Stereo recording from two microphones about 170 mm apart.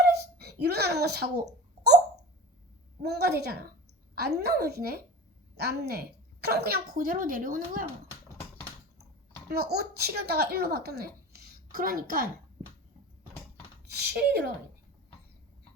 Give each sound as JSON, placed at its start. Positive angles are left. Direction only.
{"t": 0.1, "sound": "a sound", "side_deg": -70}
{"t": 3.0, "sound": "a woman's voice", "side_deg": -70}
{"t": 9.5, "sound": "speech", "side_deg": -70}
{"t": 11.7, "sound": "a woman's voice", "side_deg": -60}
{"t": 13.9, "sound": "speech", "side_deg": -70}